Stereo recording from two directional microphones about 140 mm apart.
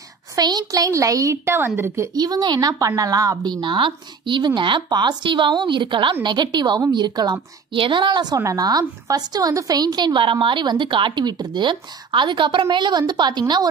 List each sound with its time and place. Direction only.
0.4 s a woman's voice: 30° right (ahead or behind)
2.1 s a woman's voice: 30° right (ahead or behind)